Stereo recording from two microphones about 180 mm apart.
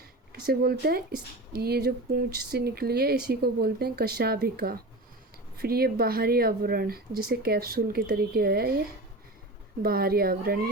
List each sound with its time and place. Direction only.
0.4 s a woman's voice: 60° right (ahead or behind)
9.8 s a woman's voice: 55° right (ahead or behind)